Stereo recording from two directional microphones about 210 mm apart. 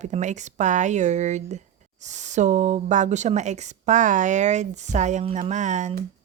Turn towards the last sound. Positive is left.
turn(degrees=-35)  # may be behind; listen again after turning